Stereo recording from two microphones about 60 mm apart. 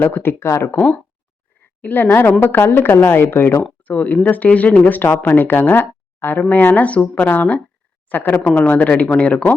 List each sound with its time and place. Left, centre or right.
0.0 s a woman's voice: left
1.8 s a woman's voice: left
3.8 s speech: left
5.0 s a woman's voice: left